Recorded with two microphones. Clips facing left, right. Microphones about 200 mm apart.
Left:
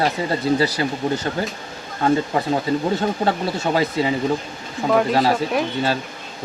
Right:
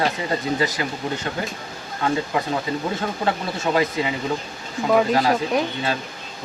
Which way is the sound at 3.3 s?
30° left (ahead or behind).